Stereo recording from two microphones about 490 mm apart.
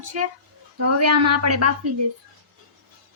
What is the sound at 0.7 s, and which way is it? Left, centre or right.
A woman's voice, right.